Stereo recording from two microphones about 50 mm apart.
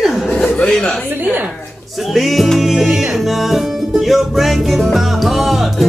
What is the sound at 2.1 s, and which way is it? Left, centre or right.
Music, centre.